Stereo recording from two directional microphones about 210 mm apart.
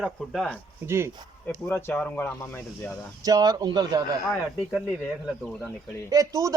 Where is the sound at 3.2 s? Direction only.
20° right (ahead or behind).